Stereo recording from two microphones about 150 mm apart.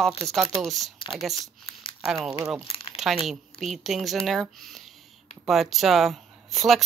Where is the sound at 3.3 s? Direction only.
Centre (ahead or behind).